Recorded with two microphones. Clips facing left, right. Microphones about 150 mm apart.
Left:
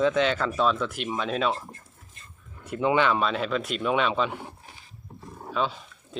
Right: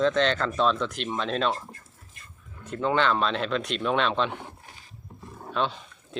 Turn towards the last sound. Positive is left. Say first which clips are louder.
# right 1 dB
turn(degrees=0)  # may be behind; listen again after turning